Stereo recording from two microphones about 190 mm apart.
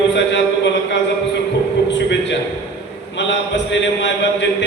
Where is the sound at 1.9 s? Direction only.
70° left (ahead or behind).